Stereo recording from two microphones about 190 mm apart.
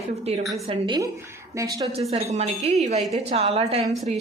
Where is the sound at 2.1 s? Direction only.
35° right (ahead or behind).